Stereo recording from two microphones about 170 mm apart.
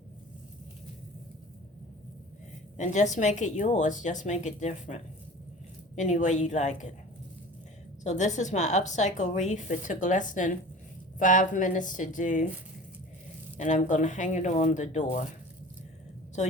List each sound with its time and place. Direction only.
2.7 s speech: 45° left (ahead or behind)
6.0 s speech: 45° left (ahead or behind)
8.0 s speech: 45° left (ahead or behind)
13.6 s speech: 45° left (ahead or behind)